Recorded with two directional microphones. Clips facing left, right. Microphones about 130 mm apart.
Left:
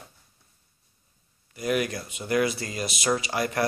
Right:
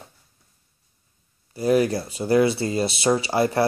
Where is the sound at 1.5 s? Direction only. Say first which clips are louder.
Right 7 dB; 30° right (ahead or behind).